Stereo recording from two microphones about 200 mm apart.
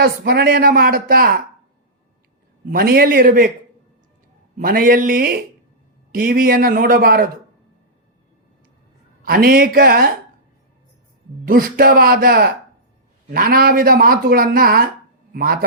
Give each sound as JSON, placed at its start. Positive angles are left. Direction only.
{"t": 0.0, "sound": "speech", "side_deg": -50}
{"t": 2.6, "sound": "speech", "side_deg": -50}
{"t": 4.5, "sound": "speech", "side_deg": -45}
{"t": 9.2, "sound": "speech", "side_deg": -50}
{"t": 11.4, "sound": "speech", "side_deg": -45}